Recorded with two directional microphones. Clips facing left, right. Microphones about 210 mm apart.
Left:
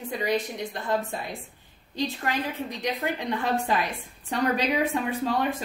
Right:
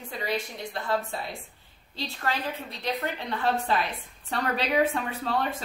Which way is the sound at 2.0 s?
15° left (ahead or behind).